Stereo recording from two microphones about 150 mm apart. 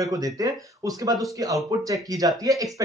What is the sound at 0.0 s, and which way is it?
Speech, 25° right (ahead or behind).